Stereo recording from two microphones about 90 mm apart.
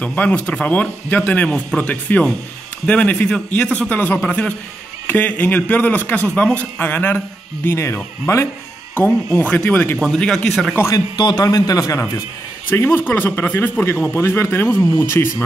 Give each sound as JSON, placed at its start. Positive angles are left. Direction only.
{"t": 0.0, "sound": "a man's voice", "side_deg": 15}
{"t": 3.9, "sound": "a man's voice", "side_deg": 20}
{"t": 8.9, "sound": "a man's voice", "side_deg": 15}
{"t": 9.9, "sound": "speech", "side_deg": 5}
{"t": 11.3, "sound": "speech", "side_deg": 40}